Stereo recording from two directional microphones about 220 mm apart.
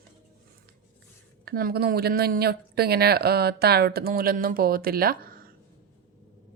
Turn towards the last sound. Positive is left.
turn(degrees=-40)  # may be behind; listen again after turning